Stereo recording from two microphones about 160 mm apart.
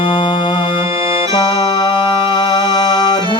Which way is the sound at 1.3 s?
30° left (ahead or behind).